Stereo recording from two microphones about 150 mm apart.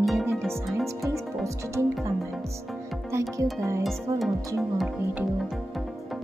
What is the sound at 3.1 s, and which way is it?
Speech, 20° right (ahead or behind).